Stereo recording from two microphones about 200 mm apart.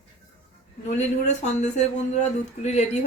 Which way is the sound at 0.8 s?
35° left (ahead or behind).